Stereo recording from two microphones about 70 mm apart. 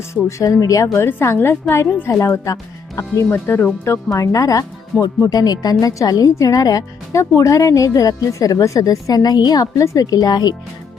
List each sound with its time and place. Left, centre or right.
0.1 s speech: left
0.9 s a woman's voice: left
3.5 s a woman's voice: left
4.1 s speech: left
5.3 s a woman's voice: left
9.7 s a woman's voice: left